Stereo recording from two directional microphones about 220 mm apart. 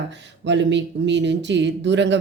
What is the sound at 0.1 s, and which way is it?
Speech, 55° right (ahead or behind).